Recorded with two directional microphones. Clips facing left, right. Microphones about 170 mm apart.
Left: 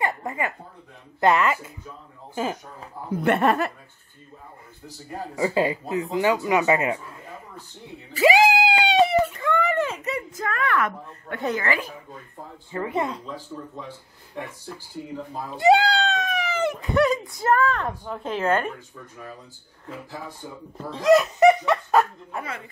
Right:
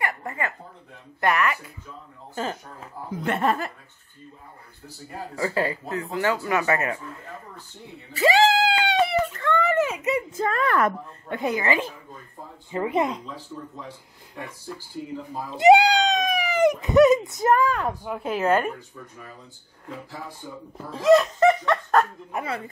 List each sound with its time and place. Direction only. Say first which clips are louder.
0.0 s speech: left 2 dB; 15° left (ahead or behind)
1.2 s speech: left 3 dB; 25° left (ahead or behind)
3.3 s speech: left 4 dB; 65° left (ahead or behind)
5.3 s speech: left 3 dB; 20° left (ahead or behind)
8.2 s a sound: left 1 dB; 10° left (ahead or behind)
9.7 s a sound: right 2 dB; 10° right (ahead or behind)
10.3 s a woman's voice: left 1 dB; 30° right (ahead or behind)
11.2 s a woman's voice: right 1 dB; 15° right (ahead or behind)
15.5 s speech: right 3 dB; 15° right (ahead or behind)
20.7 s speech: right 1 dB; centre (ahead or behind)
22.3 s a woman's voice: right 3 dB; 25° right (ahead or behind)